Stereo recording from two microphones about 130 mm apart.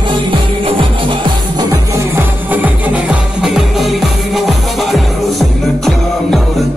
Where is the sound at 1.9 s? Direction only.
15° right (ahead or behind).